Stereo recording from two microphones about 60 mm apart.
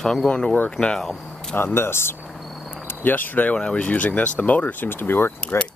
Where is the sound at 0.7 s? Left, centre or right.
Centre.